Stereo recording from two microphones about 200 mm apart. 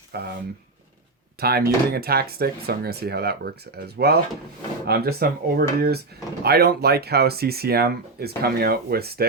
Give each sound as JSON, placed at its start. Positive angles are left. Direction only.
{"t": 0.1, "sound": "speech", "side_deg": -50}
{"t": 1.4, "sound": "speech", "side_deg": -50}